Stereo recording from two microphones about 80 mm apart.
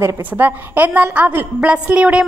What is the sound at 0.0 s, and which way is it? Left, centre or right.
A woman's voice, right.